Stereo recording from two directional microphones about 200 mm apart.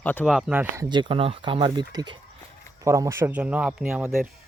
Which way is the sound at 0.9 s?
25° right (ahead or behind).